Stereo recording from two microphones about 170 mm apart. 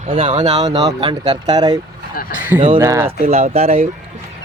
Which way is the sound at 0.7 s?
30° right (ahead or behind).